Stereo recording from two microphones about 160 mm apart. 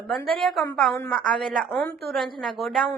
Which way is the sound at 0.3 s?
Centre (ahead or behind).